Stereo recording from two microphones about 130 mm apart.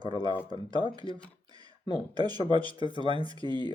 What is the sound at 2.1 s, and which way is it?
Speech, 35° right (ahead or behind).